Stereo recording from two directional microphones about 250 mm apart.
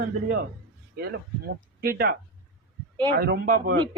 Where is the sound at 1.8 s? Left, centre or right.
Right.